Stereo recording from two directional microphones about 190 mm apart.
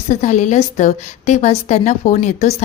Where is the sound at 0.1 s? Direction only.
40° left (ahead or behind).